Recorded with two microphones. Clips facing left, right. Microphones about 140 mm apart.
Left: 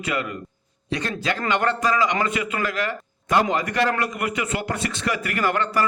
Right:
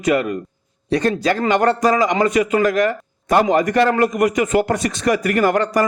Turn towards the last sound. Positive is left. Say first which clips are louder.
# right 6 dB
turn(degrees=-40)  # may be behind; listen again after turning